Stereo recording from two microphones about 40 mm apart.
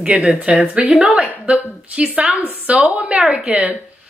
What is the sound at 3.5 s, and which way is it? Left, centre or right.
Speech, right.